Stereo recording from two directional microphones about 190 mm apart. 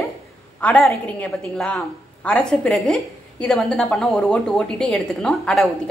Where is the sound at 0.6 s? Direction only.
5° left (ahead or behind).